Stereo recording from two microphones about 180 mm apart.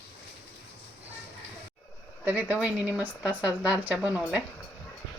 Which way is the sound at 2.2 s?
10° right (ahead or behind).